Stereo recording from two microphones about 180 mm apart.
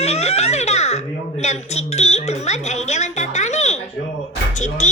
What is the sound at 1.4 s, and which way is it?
Speech, 40° left (ahead or behind).